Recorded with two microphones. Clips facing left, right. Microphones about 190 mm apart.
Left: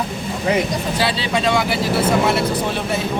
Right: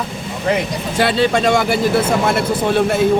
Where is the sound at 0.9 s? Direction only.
50° right (ahead or behind).